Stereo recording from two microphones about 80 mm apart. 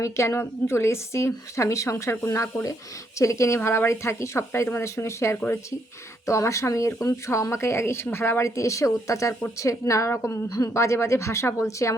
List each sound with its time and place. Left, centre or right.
0.0 s a woman's voice: left